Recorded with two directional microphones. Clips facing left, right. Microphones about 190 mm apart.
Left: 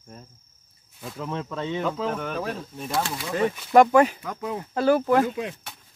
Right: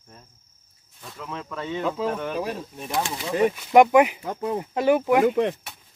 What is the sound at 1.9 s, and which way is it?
Speech, 5° right (ahead or behind).